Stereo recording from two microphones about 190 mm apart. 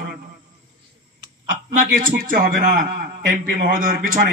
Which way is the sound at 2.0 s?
45° right (ahead or behind).